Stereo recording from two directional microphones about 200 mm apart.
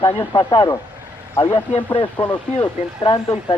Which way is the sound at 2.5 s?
25° left (ahead or behind).